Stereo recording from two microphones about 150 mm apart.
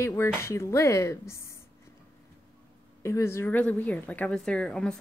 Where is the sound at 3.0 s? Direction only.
20° left (ahead or behind).